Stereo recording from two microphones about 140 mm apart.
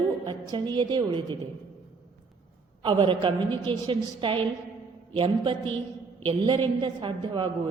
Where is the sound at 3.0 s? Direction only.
40° right (ahead or behind).